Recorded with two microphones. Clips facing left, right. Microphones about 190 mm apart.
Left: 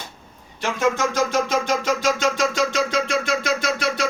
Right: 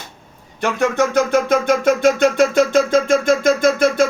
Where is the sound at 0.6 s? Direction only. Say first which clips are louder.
Right 4 dB; 60° right (ahead or behind).